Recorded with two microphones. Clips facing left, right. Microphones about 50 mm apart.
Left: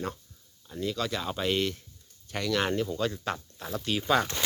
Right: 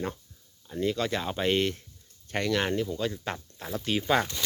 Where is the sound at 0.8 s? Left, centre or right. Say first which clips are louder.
Right 3 dB; right.